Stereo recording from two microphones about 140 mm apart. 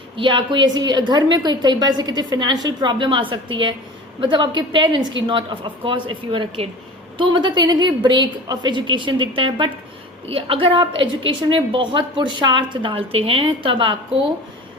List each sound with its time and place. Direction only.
0.2 s a woman's voice: 35° right (ahead or behind)